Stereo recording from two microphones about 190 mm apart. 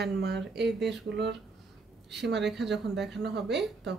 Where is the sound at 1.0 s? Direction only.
65° right (ahead or behind).